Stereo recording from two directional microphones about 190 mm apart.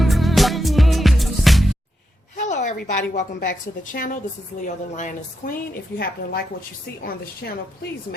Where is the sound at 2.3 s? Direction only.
40° left (ahead or behind).